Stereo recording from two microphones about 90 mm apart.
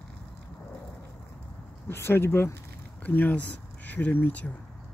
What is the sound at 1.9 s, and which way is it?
Speech, 25° left (ahead or behind).